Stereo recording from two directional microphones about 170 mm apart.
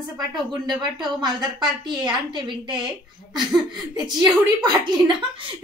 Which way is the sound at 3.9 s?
25° right (ahead or behind).